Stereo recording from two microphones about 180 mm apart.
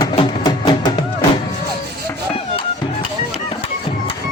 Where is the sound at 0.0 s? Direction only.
25° left (ahead or behind).